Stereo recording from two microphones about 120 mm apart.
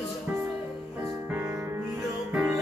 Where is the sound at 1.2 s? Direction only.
20° right (ahead or behind).